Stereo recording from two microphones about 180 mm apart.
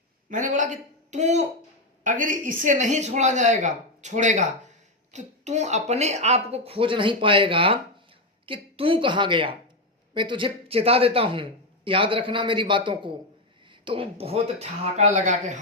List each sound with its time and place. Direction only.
0.3 s a man's voice: 45° right (ahead or behind)